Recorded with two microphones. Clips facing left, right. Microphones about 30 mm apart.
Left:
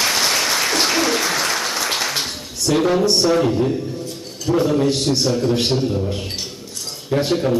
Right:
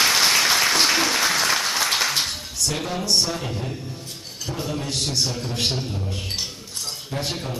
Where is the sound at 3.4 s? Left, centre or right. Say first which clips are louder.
Left 12 dB; left.